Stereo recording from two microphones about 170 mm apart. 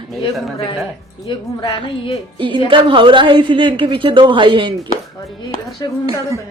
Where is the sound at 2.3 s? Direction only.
30° right (ahead or behind).